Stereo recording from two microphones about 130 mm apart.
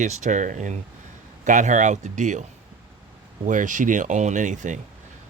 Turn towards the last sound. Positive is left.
turn(degrees=-70)  # may be behind; listen again after turning